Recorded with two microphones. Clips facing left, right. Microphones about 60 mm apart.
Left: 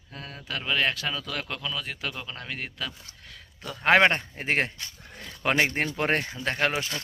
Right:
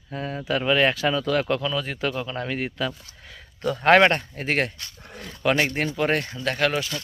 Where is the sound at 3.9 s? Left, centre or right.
Centre.